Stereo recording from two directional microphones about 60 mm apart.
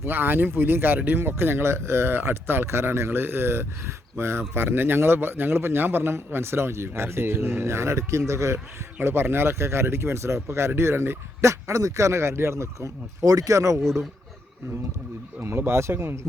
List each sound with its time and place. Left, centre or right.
0.0 s speech: right
9.0 s speech: right
15.4 s speech: right